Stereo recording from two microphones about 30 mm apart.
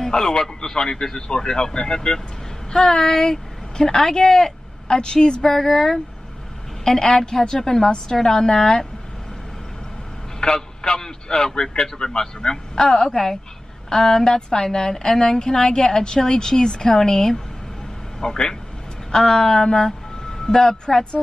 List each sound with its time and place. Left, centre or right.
0.0 s a woman's voice: left
3.0 s speech: centre
5.4 s a woman's voice: centre
10.4 s a man's voice: left